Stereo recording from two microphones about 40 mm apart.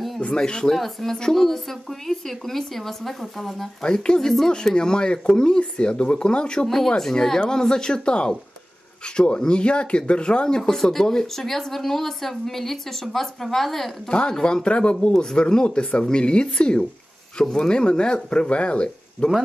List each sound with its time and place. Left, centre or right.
0.3 s speech: left; by 3.7 s centre
3.8 s speech: centre
7.0 s speech: centre
14.0 s speech: left